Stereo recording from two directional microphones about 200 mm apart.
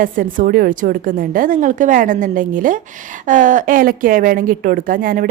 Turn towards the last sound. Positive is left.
turn(degrees=-45)  # may be behind; listen again after turning